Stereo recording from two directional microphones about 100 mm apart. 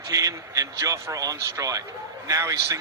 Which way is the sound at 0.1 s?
35° right (ahead or behind).